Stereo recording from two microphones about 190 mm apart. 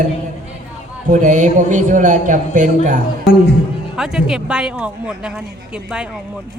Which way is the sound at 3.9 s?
Centre (ahead or behind).